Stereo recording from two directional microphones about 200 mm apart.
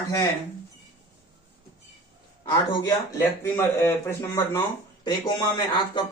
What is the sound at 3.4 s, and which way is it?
Speech, 10° left (ahead or behind).